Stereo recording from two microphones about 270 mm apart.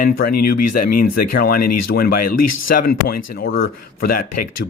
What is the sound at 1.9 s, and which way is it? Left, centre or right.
Speech, left.